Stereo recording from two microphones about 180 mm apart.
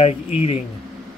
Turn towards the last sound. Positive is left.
turn(degrees=35)  # may be behind; listen again after turning